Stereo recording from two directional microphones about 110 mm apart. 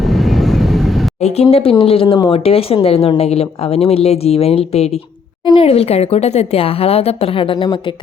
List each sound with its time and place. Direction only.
0.0 s vehicle: centre (ahead or behind)
1.2 s a woman's voice: 65° left (ahead or behind)